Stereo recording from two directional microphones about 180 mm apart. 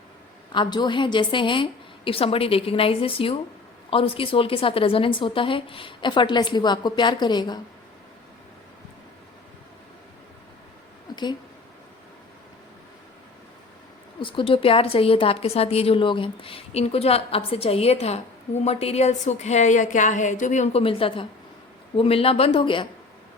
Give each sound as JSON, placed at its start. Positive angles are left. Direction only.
{"t": 0.5, "sound": "a woman's voice", "side_deg": 25}
{"t": 11.1, "sound": "a sound", "side_deg": 25}
{"t": 14.2, "sound": "a woman's voice", "side_deg": 30}